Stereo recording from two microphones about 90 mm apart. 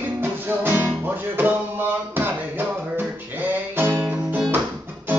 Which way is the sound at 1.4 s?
20° right (ahead or behind).